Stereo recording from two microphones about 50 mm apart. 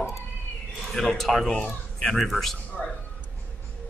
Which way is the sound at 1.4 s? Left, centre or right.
Centre.